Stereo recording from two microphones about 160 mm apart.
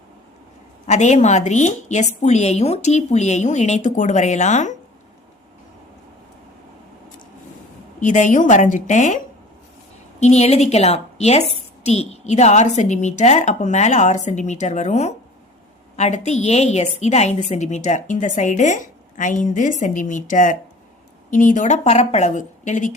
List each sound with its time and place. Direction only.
0.9 s a woman's voice: 45° left (ahead or behind)
8.0 s a woman's voice: 50° left (ahead or behind)